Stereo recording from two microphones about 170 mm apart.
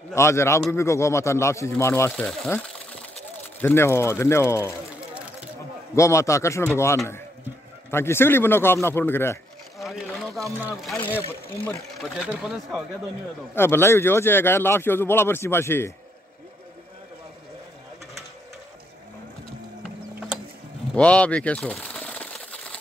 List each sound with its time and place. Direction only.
0.1 s a man's voice: 15° left (ahead or behind)
3.6 s a man's voice: 15° left (ahead or behind)
5.9 s a man's voice: 15° left (ahead or behind)
7.9 s a man's voice: 15° left (ahead or behind)
9.8 s a sound: centre (ahead or behind)
11.0 s a man's voice: 10° left (ahead or behind)
12.0 s speech: 5° right (ahead or behind)
13.6 s a man's voice: 15° left (ahead or behind)
20.9 s a sound: 5° left (ahead or behind)